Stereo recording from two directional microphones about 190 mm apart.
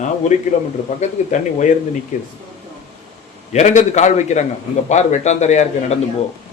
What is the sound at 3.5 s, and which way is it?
Speech, 35° left (ahead or behind).